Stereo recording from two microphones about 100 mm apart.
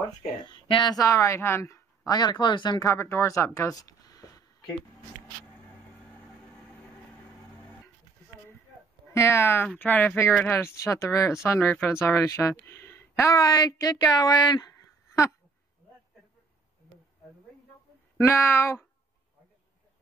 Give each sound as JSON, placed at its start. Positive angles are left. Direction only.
{"t": 0.5, "sound": "speech", "side_deg": 55}
{"t": 0.9, "sound": "speech", "side_deg": 35}
{"t": 2.8, "sound": "speech", "side_deg": 25}
{"t": 9.1, "sound": "speech", "side_deg": 25}
{"t": 13.3, "sound": "speech", "side_deg": 40}
{"t": 18.1, "sound": "speech", "side_deg": 25}